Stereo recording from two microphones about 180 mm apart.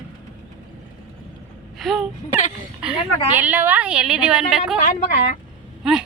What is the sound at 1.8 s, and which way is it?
Speech, centre (ahead or behind).